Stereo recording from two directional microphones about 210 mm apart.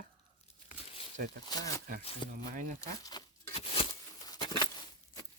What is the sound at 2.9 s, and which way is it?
Speech, 15° left (ahead or behind).